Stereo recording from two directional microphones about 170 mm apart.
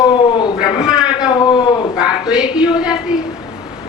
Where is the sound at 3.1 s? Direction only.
5° right (ahead or behind).